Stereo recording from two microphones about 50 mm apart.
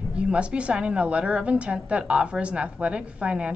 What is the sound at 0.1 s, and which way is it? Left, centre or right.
A woman's voice, right.